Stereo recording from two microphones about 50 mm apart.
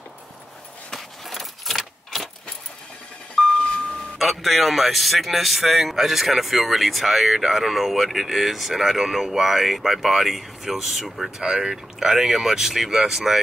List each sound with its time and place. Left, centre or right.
0.9 s keys jangling: centre
3.4 s a sound: centre
4.2 s speech: centre